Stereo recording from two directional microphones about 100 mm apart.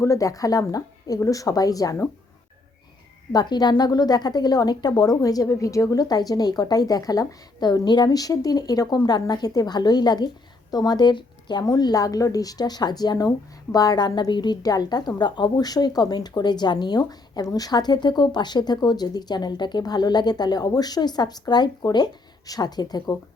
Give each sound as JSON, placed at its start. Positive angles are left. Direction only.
{"t": 0.0, "sound": "a woman's voice", "side_deg": 35}
{"t": 3.3, "sound": "a woman's voice", "side_deg": 45}